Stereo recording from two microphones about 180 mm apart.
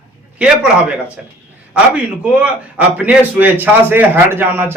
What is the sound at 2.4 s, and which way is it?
A man's voice, 5° right (ahead or behind).